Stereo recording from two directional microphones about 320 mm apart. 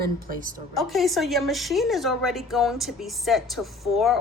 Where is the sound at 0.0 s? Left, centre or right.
Right.